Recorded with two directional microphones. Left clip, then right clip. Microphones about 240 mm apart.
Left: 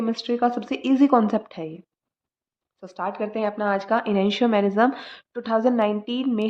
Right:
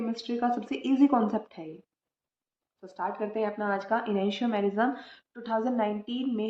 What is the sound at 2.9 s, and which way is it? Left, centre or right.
Speech, left.